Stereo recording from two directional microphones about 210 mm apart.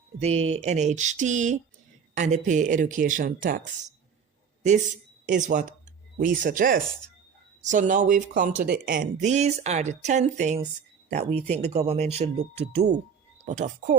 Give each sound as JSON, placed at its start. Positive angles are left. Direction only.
{"t": 0.2, "sound": "speech", "side_deg": -30}
{"t": 5.4, "sound": "speech", "side_deg": -40}
{"t": 11.3, "sound": "speech", "side_deg": 5}
{"t": 11.6, "sound": "speech", "side_deg": -30}